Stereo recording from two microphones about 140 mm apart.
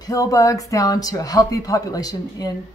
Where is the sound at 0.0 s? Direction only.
25° left (ahead or behind).